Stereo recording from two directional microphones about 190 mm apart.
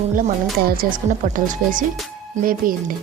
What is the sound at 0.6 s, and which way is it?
A woman's voice, 45° right (ahead or behind).